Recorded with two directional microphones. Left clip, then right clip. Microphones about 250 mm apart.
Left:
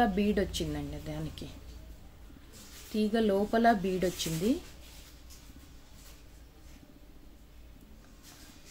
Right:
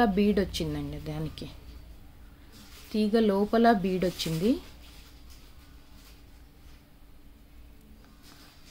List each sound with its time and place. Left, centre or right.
0.0 s speech: centre
2.9 s speech: centre